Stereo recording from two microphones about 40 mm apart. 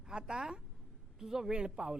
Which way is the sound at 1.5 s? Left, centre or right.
Right.